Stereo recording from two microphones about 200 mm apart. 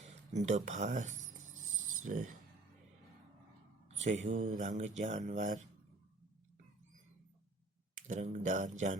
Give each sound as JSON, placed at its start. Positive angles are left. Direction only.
{"t": 0.0, "sound": "speech", "side_deg": -35}
{"t": 1.6, "sound": "pulleys", "side_deg": -90}
{"t": 3.8, "sound": "mantra", "side_deg": -35}
{"t": 4.8, "sound": "speech", "side_deg": -35}
{"t": 7.9, "sound": "speech", "side_deg": -40}